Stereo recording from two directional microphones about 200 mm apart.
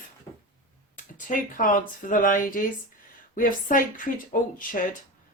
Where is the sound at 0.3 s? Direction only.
15° left (ahead or behind).